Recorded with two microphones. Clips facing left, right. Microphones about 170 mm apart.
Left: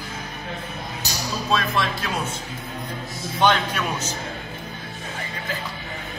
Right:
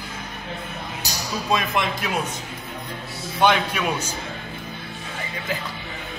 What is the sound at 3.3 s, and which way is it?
Speech, 10° right (ahead or behind).